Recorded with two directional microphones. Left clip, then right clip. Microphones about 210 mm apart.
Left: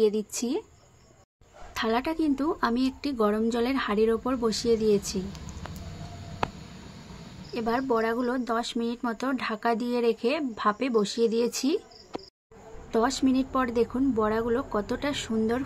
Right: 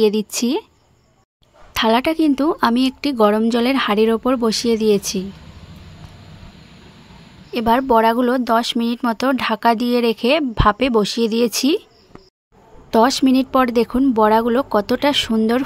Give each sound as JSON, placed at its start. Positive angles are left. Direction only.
{"t": 0.0, "sound": "speech", "side_deg": -50}
{"t": 1.7, "sound": "speech", "side_deg": -50}
{"t": 7.5, "sound": "speech", "side_deg": -50}
{"t": 12.9, "sound": "speech", "side_deg": -50}